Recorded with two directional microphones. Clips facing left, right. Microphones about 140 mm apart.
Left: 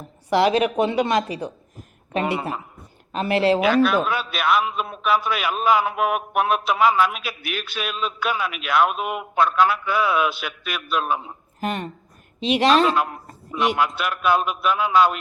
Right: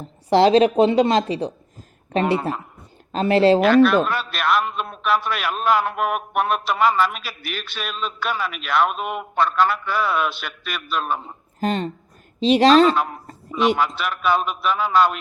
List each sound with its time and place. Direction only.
0.0 s speech: 30° right (ahead or behind)
2.2 s a man's voice: centre (ahead or behind)
3.1 s speech: 30° right (ahead or behind)
3.6 s a man's voice: centre (ahead or behind)
11.6 s a woman's voice: 25° right (ahead or behind)
12.6 s a man's voice: centre (ahead or behind)